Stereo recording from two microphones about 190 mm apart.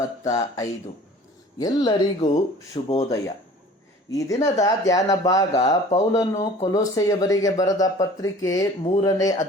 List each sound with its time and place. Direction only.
0.3 s speech: 20° left (ahead or behind)